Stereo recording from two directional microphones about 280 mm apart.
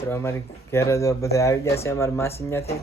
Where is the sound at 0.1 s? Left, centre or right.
Centre.